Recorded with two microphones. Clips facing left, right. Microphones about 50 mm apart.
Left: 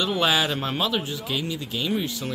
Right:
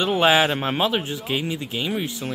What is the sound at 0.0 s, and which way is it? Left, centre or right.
Speech, right.